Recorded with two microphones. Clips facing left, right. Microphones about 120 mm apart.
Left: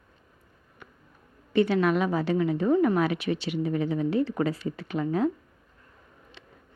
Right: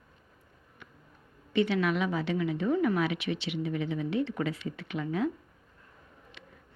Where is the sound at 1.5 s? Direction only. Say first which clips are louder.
Left 4 dB; 40° left (ahead or behind).